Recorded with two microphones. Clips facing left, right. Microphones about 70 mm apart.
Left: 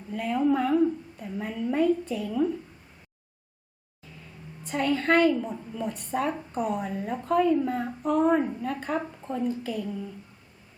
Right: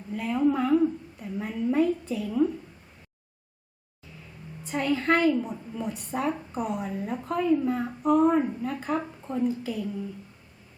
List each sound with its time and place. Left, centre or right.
0.1 s a sound: centre
2.1 s a woman's voice: centre
4.6 s a woman's voice: centre